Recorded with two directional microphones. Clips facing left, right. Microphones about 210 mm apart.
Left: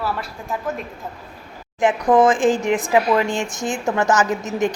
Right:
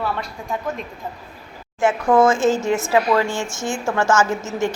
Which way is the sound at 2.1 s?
20° left (ahead or behind).